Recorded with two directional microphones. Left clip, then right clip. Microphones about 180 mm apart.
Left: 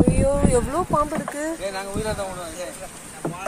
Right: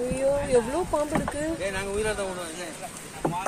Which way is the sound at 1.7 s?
20° right (ahead or behind).